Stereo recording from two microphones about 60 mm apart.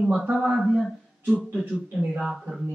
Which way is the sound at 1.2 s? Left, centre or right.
Centre.